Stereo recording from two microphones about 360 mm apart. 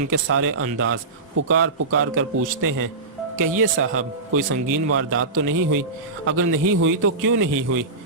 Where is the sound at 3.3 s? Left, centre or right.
Right.